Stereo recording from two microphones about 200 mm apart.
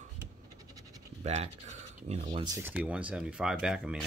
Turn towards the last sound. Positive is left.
turn(degrees=-5)  # may be behind; listen again after turning